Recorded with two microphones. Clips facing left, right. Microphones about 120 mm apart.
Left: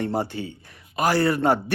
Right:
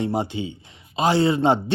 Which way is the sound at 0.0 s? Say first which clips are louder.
Right 2 dB; 15° right (ahead or behind).